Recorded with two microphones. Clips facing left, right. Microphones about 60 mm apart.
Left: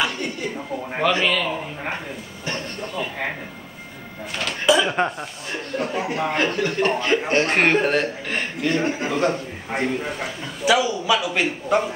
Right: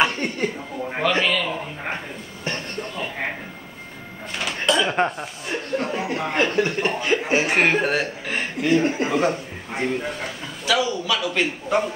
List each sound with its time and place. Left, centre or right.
0.0 s a sound: right
0.8 s a sound: centre
4.6 s speech: centre
5.9 s a man's voice: centre
6.5 s speech: right
7.1 s speech: centre
9.3 s a man's voice: centre
10.6 s a man's voice: centre